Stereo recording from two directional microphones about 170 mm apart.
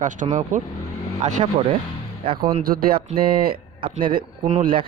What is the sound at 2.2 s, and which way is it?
Speech, 30° right (ahead or behind).